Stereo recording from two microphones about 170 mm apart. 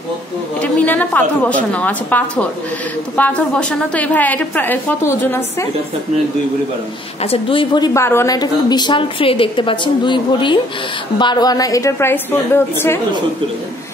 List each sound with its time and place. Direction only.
0.6 s a woman's voice: 10° left (ahead or behind)
7.2 s a woman's voice: 30° left (ahead or behind); by 13.0 s 15° left (ahead or behind)